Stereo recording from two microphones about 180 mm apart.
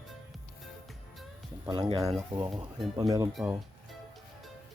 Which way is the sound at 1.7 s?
25° right (ahead or behind).